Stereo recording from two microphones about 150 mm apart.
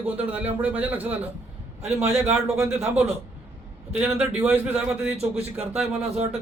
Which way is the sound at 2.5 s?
15° right (ahead or behind).